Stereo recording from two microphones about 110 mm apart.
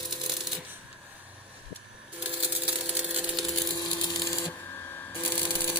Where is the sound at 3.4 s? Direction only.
Centre (ahead or behind).